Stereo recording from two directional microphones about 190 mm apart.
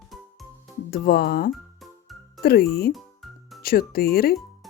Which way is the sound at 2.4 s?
55° left (ahead or behind).